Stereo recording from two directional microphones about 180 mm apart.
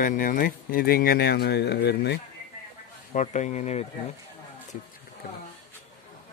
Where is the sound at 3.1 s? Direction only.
40° left (ahead or behind).